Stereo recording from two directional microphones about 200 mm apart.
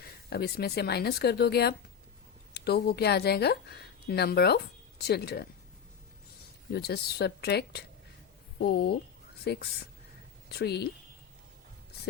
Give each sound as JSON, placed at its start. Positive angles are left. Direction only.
{"t": 0.0, "sound": "speech", "side_deg": 50}
{"t": 6.7, "sound": "speech", "side_deg": 55}